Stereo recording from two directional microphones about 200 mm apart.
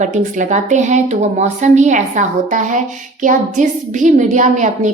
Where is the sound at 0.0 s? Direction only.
40° right (ahead or behind).